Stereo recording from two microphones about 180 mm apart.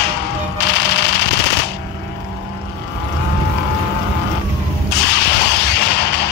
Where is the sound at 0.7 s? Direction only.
70° left (ahead or behind).